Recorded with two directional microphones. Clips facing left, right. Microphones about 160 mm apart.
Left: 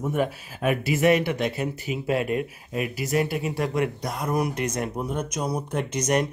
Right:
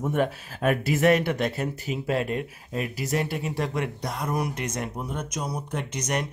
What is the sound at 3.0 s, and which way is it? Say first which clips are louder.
Speech: left 4 dB; 15° left (ahead or behind).